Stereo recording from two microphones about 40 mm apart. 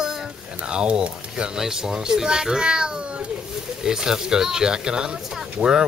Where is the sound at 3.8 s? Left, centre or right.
Centre.